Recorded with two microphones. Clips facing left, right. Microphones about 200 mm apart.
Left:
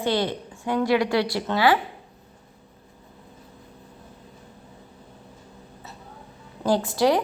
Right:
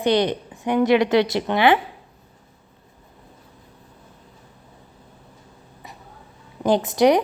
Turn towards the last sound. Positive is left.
turn(degrees=-20)  # may be behind; listen again after turning